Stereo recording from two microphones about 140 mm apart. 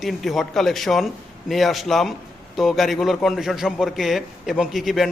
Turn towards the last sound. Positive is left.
turn(degrees=0)  # may be behind; listen again after turning